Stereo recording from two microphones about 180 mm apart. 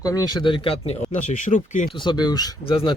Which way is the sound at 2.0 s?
25° left (ahead or behind).